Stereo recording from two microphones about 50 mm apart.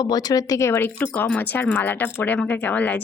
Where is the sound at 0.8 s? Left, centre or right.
Left.